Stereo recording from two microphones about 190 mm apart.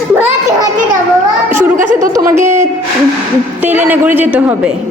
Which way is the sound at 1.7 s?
40° right (ahead or behind).